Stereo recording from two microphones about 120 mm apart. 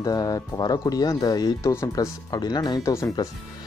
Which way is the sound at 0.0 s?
30° left (ahead or behind).